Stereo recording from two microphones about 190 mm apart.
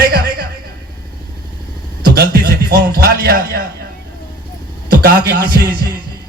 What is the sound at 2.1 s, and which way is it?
Music, 55° right (ahead or behind).